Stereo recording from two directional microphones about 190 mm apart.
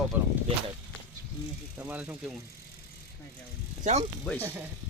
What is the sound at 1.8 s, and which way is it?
Speech, 10° right (ahead or behind).